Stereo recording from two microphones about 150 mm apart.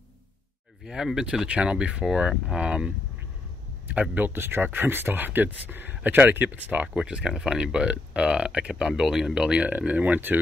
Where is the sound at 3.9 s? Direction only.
10° right (ahead or behind).